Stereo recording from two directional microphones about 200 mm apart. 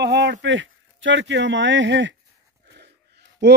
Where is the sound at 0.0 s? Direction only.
60° right (ahead or behind).